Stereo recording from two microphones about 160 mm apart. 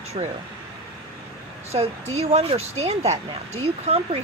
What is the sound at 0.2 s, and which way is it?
Speech, 35° right (ahead or behind).